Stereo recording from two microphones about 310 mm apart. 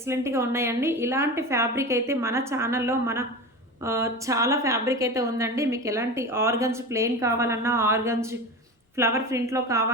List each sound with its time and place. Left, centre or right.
0.1 s a woman's voice: centre